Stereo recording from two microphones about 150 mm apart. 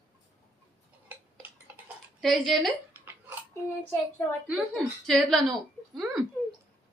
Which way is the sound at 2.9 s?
10° right (ahead or behind).